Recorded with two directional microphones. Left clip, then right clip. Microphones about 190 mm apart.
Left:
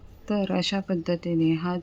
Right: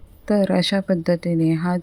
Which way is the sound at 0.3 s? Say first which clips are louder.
Right 7 dB; 25° right (ahead or behind).